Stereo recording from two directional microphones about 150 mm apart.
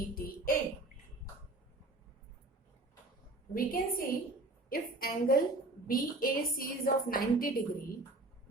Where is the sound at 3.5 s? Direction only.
70° left (ahead or behind).